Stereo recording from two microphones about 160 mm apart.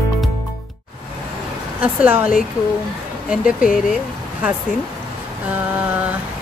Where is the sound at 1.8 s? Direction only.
5° right (ahead or behind).